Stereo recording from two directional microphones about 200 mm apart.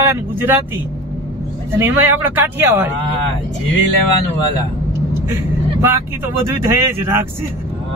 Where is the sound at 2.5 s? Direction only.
10° right (ahead or behind).